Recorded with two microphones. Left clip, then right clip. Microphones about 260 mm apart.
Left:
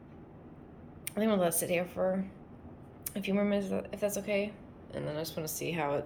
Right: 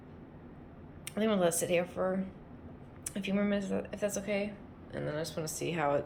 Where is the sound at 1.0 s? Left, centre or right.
Centre.